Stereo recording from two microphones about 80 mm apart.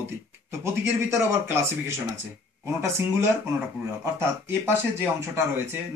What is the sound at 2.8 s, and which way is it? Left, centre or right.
Speech, right.